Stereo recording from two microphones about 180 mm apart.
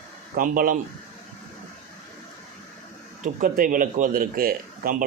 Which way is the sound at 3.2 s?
45° right (ahead or behind).